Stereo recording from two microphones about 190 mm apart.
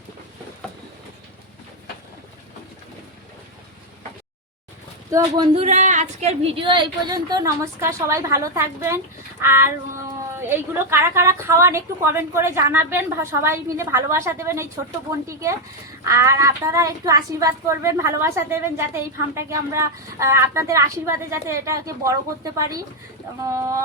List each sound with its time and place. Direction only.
5.5 s a woman's voice: 40° right (ahead or behind); by 23.7 s 15° right (ahead or behind)